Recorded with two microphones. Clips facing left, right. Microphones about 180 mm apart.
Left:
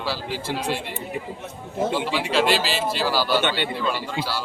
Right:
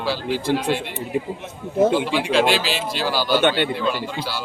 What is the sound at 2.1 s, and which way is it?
Speech, 5° left (ahead or behind).